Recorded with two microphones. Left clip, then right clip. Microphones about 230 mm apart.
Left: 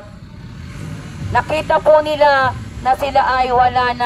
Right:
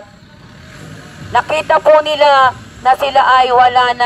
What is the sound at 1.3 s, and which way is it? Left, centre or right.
A man's voice, right.